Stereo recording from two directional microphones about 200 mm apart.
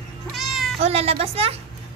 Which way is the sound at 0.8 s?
30° right (ahead or behind).